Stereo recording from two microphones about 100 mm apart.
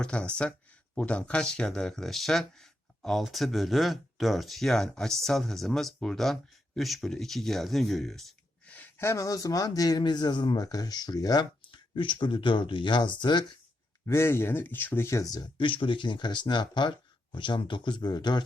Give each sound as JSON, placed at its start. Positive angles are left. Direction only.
{"t": 0.0, "sound": "speech", "side_deg": 10}
{"t": 8.6, "sound": "a sound", "side_deg": 15}
{"t": 9.0, "sound": "speech", "side_deg": 35}
{"t": 11.7, "sound": "speech", "side_deg": 55}
{"t": 14.1, "sound": "speech", "side_deg": 25}
{"t": 15.5, "sound": "speech", "side_deg": 60}